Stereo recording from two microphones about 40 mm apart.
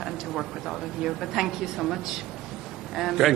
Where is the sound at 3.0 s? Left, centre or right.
Centre.